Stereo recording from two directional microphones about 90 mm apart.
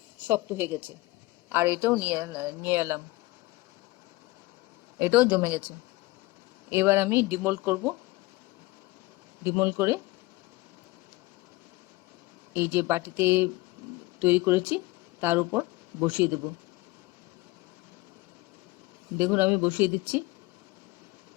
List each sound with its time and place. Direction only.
0.2 s a woman's voice: 20° right (ahead or behind)
4.9 s speech: 20° right (ahead or behind)
6.7 s a woman's voice: 25° right (ahead or behind)
9.4 s a woman's voice: 25° right (ahead or behind)
12.5 s a woman's voice: 25° right (ahead or behind)
19.2 s a woman's voice: 20° right (ahead or behind)